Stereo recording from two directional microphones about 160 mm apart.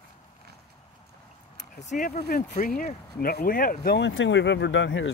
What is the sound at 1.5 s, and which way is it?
Speech, 50° left (ahead or behind).